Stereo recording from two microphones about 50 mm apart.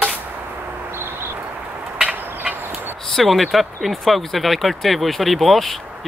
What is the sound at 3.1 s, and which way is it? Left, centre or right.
Speech, centre.